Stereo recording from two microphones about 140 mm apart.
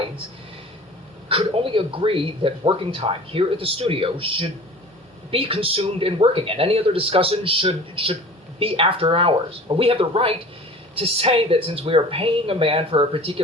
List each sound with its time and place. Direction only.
1.3 s speech: 40° right (ahead or behind)